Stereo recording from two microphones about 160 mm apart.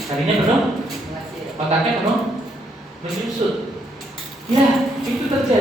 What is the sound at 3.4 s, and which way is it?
Speech, 40° right (ahead or behind).